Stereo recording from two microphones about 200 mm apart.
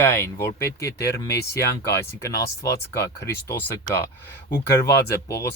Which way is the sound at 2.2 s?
15° left (ahead or behind).